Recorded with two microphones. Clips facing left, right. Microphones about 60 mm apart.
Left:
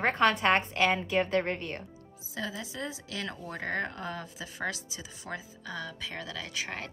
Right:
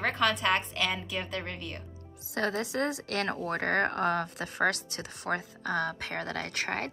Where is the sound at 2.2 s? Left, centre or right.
Right.